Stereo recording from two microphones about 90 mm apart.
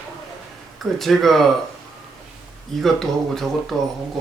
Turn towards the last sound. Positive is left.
turn(degrees=0)  # may be behind; listen again after turning